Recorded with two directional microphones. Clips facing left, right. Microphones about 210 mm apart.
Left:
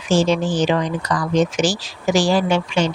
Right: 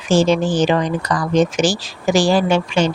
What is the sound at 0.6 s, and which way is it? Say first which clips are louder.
Speech: right 2 dB; 45° right (ahead or behind).